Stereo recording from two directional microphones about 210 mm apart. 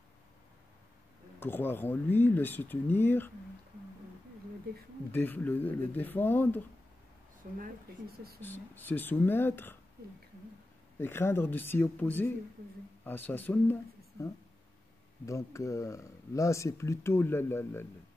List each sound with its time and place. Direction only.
1.4 s speech: 10° left (ahead or behind)
5.1 s speech: 10° left (ahead or behind)
7.4 s speech: 45° right (ahead or behind)
8.4 s speech: 10° left (ahead or behind)
11.0 s speech: 10° left (ahead or behind)
15.2 s speech: 15° left (ahead or behind)